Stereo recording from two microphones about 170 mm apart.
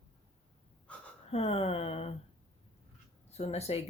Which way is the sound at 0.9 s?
5° left (ahead or behind).